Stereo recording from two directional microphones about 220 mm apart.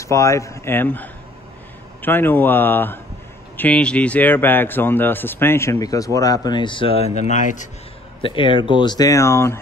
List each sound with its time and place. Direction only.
0.0 s a man's voice: 15° left (ahead or behind); by 7.6 s 35° left (ahead or behind)
8.2 s speech: 25° left (ahead or behind)